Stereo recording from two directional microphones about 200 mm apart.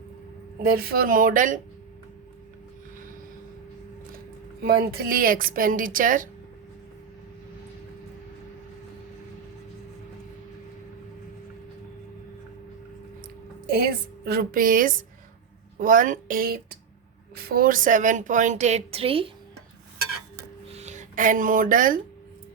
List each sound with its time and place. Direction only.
0.6 s a woman's voice: 50° right (ahead or behind)
4.6 s a woman's voice: 50° right (ahead or behind)
13.7 s a woman's voice: 50° right (ahead or behind); by 19.3 s 30° right (ahead or behind)
20.7 s speech: 35° right (ahead or behind)